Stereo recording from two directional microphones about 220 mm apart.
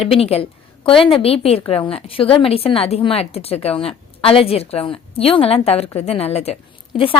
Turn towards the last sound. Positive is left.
turn(degrees=25)  # may be behind; listen again after turning